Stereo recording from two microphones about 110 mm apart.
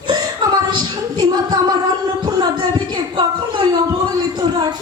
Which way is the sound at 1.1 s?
40° right (ahead or behind).